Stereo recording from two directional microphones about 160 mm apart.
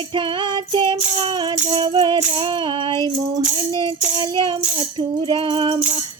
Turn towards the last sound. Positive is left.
turn(degrees=-30)  # may be behind; listen again after turning